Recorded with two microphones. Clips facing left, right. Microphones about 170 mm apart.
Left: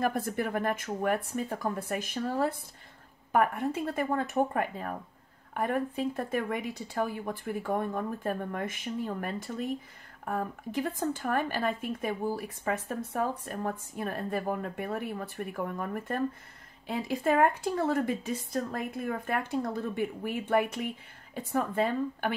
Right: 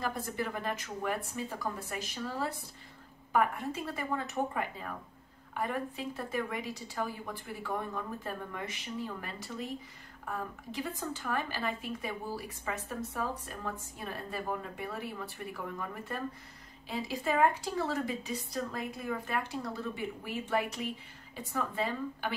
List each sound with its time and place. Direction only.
0.0 s speech: 55° left (ahead or behind)